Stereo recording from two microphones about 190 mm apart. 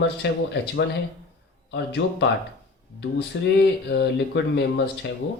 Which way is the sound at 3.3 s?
65° left (ahead or behind).